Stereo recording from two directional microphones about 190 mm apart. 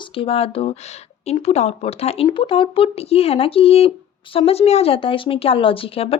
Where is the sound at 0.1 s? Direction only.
30° left (ahead or behind).